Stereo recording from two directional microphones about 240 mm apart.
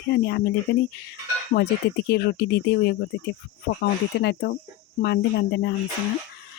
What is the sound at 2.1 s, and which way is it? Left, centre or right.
Speech, left.